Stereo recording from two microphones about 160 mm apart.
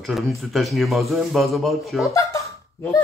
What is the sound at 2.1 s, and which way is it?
Speech, 20° left (ahead or behind).